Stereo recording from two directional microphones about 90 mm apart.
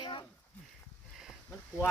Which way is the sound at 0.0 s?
65° left (ahead or behind).